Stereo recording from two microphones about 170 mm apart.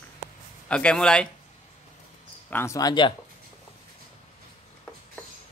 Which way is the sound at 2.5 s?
15° left (ahead or behind).